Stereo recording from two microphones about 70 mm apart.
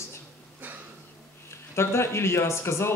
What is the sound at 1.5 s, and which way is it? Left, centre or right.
Speech, left.